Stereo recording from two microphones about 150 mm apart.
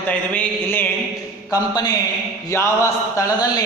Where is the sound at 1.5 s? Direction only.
25° left (ahead or behind).